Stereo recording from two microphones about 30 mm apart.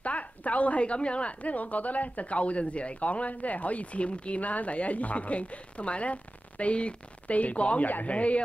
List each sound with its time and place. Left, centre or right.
0.0 s a woman's voice: left
1.4 s speech: left
7.8 s speech: left
8.1 s speech: left